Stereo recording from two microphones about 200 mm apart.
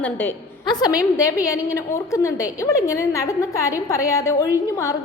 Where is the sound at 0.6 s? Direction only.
20° left (ahead or behind).